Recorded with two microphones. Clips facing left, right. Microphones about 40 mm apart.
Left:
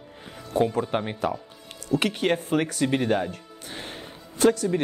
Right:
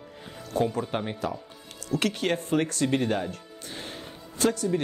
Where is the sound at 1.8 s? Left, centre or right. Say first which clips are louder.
Left 3 dB; left.